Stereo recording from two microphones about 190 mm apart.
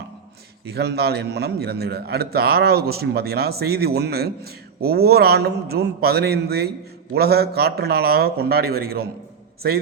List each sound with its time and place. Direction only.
0.7 s a man's voice: 60° right (ahead or behind)